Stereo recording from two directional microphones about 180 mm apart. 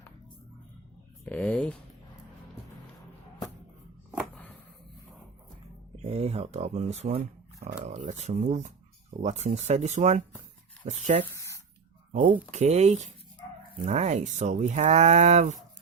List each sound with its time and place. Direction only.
1.2 s speech: 10° left (ahead or behind)
6.0 s speech: 35° right (ahead or behind)
11.3 s spray: 15° left (ahead or behind)
12.1 s speech: 45° right (ahead or behind)